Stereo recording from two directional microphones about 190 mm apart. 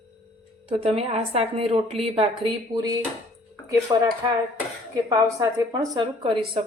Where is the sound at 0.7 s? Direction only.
30° right (ahead or behind).